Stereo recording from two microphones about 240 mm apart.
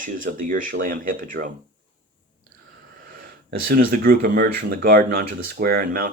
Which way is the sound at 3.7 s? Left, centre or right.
Right.